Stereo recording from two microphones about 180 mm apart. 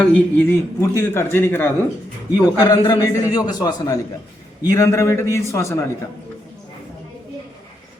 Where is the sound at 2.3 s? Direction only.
20° left (ahead or behind).